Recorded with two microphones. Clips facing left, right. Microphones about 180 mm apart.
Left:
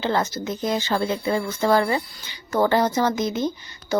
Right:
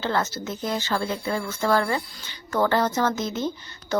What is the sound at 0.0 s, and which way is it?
Speech, 15° left (ahead or behind).